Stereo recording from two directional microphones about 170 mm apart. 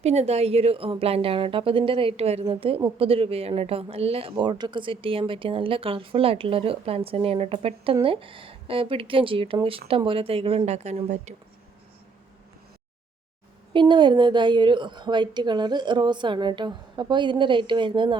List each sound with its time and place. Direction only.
0.0 s a woman's voice: 40° right (ahead or behind)
13.7 s a woman's voice: 25° right (ahead or behind)